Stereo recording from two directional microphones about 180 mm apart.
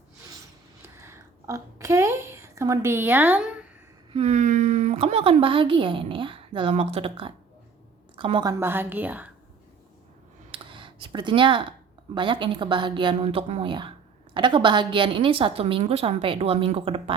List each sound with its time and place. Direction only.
0.9 s a woman's voice: 15° right (ahead or behind)
4.1 s a woman's voice: 35° right (ahead or behind); by 9.3 s 10° right (ahead or behind)
10.5 s a sound: 25° right (ahead or behind)
12.1 s a woman's voice: 25° right (ahead or behind)